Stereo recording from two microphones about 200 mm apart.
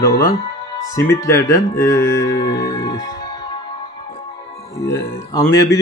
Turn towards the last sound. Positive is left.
turn(degrees=15)  # may be behind; listen again after turning